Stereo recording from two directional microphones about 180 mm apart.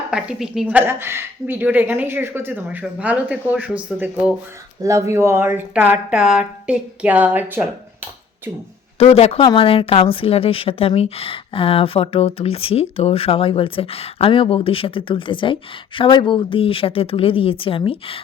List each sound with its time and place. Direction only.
0.1 s a woman's voice: 5° right (ahead or behind)
9.0 s speech: 35° left (ahead or behind)